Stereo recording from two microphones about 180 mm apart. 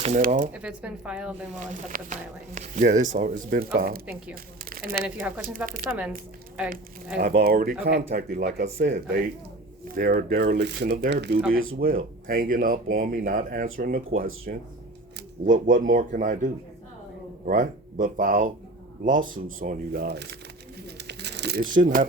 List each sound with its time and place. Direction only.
0.0 s speech: 40° right (ahead or behind)
0.5 s a woman's voice: 5° right (ahead or behind)
1.5 s speech: 45° right (ahead or behind)
4.7 s crumpling: 55° right (ahead or behind)
5.4 s speech: 50° right (ahead or behind)
7.2 s speech: 50° right (ahead or behind); by 11.3 s 70° right (ahead or behind)
11.5 s speech: 55° right (ahead or behind)
21.0 s crumpling: 70° right (ahead or behind); by 22.0 s 45° right (ahead or behind)